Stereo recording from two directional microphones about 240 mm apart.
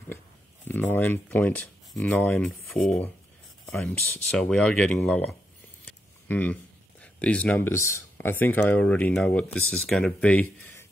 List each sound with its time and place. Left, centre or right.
0.7 s speech: centre
6.2 s a sound: centre
7.9 s speech: centre